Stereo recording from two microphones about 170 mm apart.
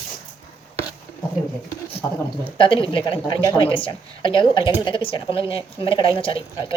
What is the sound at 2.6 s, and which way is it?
A woman's voice, 30° left (ahead or behind).